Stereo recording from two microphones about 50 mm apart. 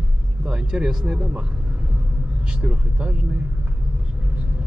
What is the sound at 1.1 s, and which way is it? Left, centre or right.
Vehicle, right.